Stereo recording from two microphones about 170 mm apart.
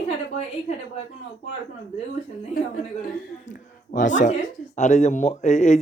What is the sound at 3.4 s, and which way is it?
Speech, 50° left (ahead or behind).